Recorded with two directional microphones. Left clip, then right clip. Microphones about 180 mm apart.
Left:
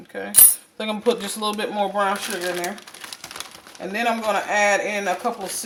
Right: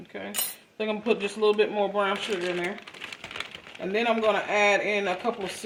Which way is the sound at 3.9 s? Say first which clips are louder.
Left 2 dB; 20° left (ahead or behind).